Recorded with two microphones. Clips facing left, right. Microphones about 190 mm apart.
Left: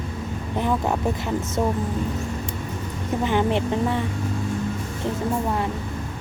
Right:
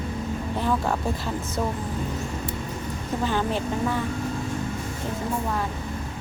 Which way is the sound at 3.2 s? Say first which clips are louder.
Left 4 dB; 20° left (ahead or behind).